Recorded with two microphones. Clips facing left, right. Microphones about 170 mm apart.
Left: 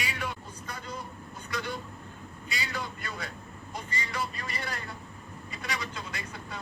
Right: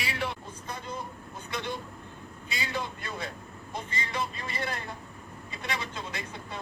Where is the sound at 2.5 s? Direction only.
25° right (ahead or behind).